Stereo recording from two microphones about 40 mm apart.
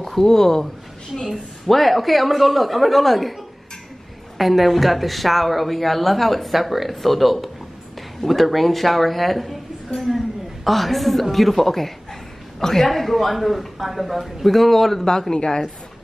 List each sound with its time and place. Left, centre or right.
0.0 s speech: centre
1.3 s a woman's voice: centre
4.4 s a woman's voice: centre
15.1 s a woman's voice: centre